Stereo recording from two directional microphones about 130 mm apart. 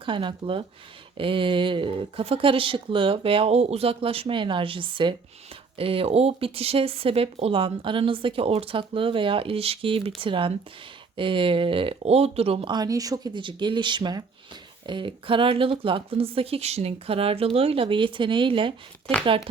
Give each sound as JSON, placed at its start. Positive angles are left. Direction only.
{"t": 0.0, "sound": "speech", "side_deg": -40}
{"t": 12.7, "sound": "speech", "side_deg": -30}